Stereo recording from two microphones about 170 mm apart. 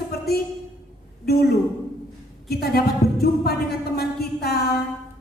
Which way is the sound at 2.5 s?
65° left (ahead or behind).